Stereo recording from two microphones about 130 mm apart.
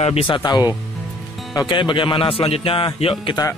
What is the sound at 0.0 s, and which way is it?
Speech, 50° left (ahead or behind).